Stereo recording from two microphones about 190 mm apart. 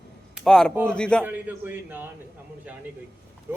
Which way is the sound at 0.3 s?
5° left (ahead or behind).